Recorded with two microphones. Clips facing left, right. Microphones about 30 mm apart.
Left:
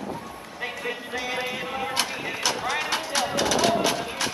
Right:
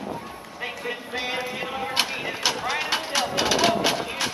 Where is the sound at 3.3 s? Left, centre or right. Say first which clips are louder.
Right 1 dB; right.